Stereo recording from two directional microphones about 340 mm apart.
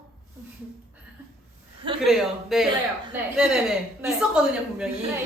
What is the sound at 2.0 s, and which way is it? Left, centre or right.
A woman's voice, centre.